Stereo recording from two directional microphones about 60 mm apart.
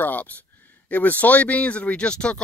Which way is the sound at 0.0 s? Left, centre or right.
Left.